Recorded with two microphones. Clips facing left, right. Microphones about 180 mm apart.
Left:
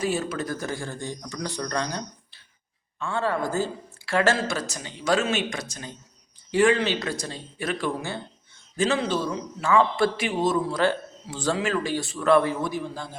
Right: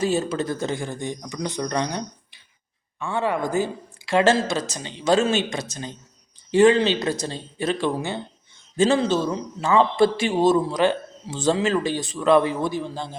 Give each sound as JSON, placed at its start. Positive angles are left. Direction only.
{"t": 0.0, "sound": "a man's voice", "side_deg": -25}